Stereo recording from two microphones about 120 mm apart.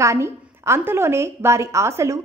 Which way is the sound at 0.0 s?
25° right (ahead or behind).